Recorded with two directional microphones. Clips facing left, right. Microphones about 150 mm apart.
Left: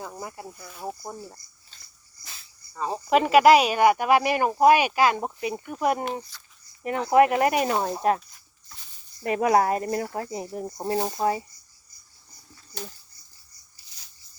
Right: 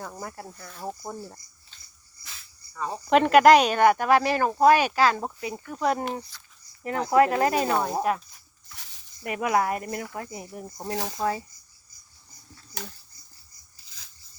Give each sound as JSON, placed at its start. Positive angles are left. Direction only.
{"t": 0.0, "sound": "speech", "side_deg": 10}
{"t": 2.2, "sound": "dog", "side_deg": 30}
{"t": 3.1, "sound": "speech", "side_deg": 5}
{"t": 7.7, "sound": "speech", "side_deg": 30}
{"t": 9.2, "sound": "speech", "side_deg": 35}